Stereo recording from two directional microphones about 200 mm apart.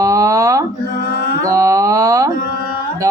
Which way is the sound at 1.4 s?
15° right (ahead or behind).